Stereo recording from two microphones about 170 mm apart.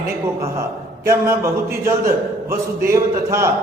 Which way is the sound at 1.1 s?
15° right (ahead or behind).